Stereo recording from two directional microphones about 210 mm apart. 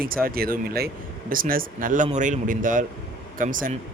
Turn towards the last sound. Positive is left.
turn(degrees=-40)  # may be behind; listen again after turning